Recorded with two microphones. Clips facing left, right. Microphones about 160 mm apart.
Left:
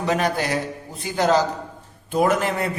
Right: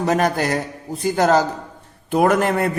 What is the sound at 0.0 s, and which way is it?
A man's voice, 45° right (ahead or behind).